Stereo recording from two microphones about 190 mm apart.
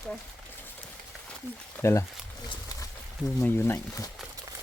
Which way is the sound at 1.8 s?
15° left (ahead or behind).